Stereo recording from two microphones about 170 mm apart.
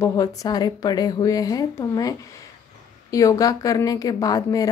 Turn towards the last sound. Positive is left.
turn(degrees=20)  # may be behind; listen again after turning